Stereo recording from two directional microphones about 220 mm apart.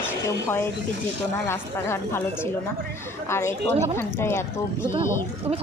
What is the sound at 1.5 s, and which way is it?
Speech, 10° left (ahead or behind).